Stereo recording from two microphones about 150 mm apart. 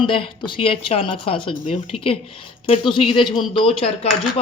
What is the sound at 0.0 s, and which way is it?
A man's voice, 35° left (ahead or behind).